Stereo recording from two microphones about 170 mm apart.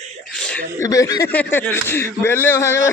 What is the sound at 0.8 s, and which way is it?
Speech, 20° left (ahead or behind).